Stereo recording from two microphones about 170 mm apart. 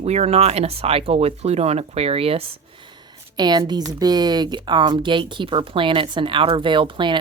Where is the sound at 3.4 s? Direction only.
25° right (ahead or behind).